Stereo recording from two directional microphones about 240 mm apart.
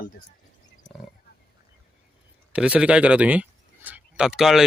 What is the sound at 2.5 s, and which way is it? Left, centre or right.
Speech, centre.